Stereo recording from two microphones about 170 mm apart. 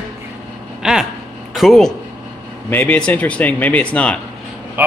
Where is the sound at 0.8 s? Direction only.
5° right (ahead or behind).